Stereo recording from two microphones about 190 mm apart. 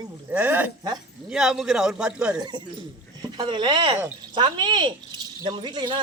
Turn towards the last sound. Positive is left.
turn(degrees=-25)  # may be behind; listen again after turning